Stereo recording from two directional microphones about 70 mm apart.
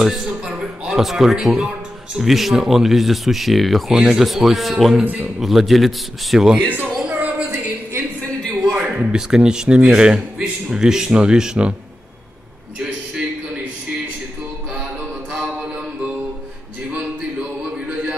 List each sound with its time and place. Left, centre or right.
0.0 s a man's voice: centre
5.0 s a man's voice: right
5.4 s speech: centre
6.6 s a man's voice: right
7.1 s a sound: centre
8.7 s a man's voice: centre
16.9 s a sound: right